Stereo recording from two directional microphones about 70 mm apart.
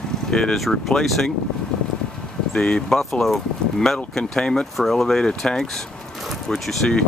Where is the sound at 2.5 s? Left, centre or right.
Centre.